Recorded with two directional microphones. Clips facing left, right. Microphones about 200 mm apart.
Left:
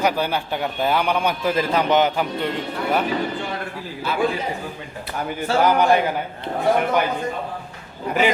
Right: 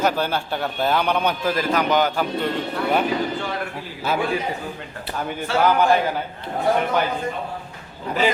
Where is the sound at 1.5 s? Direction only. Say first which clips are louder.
Left 3 dB; 25° left (ahead or behind).